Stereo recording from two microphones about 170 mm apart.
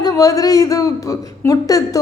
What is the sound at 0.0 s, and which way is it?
Speech, 20° left (ahead or behind).